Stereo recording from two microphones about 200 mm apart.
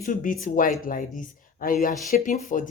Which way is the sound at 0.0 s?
45° left (ahead or behind).